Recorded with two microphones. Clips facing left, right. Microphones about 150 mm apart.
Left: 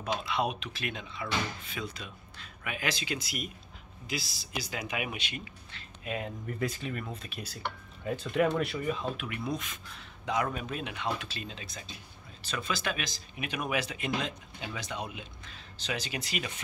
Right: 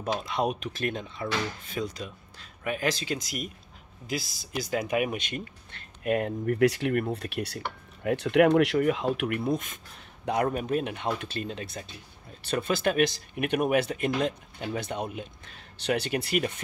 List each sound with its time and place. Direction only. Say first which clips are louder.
0.0 s speech: right 3 dB; 45° right (ahead or behind); by 9.4 s 75° right (ahead or behind)
9.5 s speech: right 6 dB; 50° right (ahead or behind)